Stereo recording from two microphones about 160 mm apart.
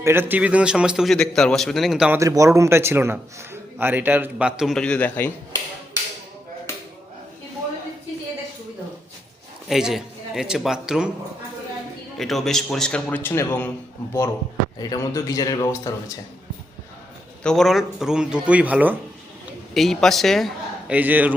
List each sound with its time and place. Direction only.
0.0 s speech: 15° right (ahead or behind)
2.1 s a man's voice: 20° right (ahead or behind); by 5.6 s 15° left (ahead or behind)
9.6 s speech: centre (ahead or behind)
12.1 s a man's voice: centre (ahead or behind); by 16.1 s 20° left (ahead or behind)
17.4 s speech: 5° left (ahead or behind)
19.7 s a man's voice: centre (ahead or behind)
20.9 s a man's voice: 10° right (ahead or behind)